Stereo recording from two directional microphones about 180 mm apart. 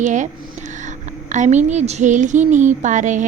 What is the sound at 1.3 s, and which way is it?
A woman's voice, 40° right (ahead or behind).